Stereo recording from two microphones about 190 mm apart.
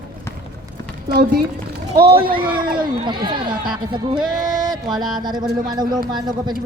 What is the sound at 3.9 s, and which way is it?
Music, 25° right (ahead or behind).